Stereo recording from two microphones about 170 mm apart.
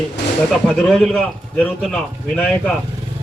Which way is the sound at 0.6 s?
Centre (ahead or behind).